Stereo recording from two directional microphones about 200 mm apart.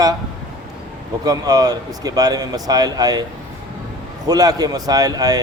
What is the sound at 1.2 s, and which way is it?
A man's voice, 20° right (ahead or behind).